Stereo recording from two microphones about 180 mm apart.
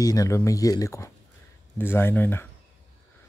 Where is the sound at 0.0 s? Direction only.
20° left (ahead or behind).